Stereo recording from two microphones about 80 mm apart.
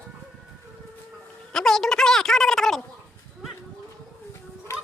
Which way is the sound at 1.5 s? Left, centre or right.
Centre.